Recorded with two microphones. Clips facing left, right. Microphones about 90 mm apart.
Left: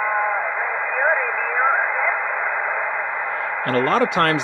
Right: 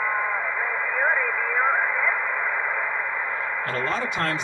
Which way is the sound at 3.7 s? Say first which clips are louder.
Left 11 dB; 65° left (ahead or behind).